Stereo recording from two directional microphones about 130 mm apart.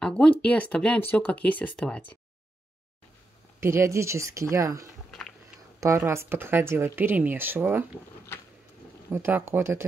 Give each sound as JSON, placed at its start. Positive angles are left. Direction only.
{"t": 0.0, "sound": "speech", "side_deg": 10}
{"t": 3.6, "sound": "a woman's voice", "side_deg": -20}
{"t": 9.1, "sound": "a woman's voice", "side_deg": -15}